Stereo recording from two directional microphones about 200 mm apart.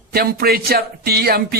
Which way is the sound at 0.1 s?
50° right (ahead or behind).